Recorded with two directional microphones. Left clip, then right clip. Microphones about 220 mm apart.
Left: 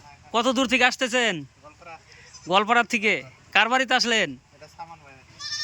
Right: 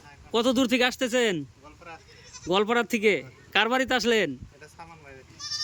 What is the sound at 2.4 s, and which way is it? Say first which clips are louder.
Speech: left 4 dB; 5° right (ahead or behind).